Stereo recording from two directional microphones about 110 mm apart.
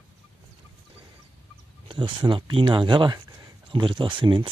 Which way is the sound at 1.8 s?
50° right (ahead or behind).